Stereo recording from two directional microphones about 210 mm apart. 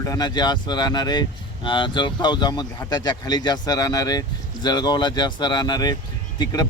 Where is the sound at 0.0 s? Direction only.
20° left (ahead or behind).